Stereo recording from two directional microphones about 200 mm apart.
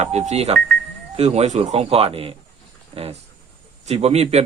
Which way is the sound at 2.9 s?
30° right (ahead or behind).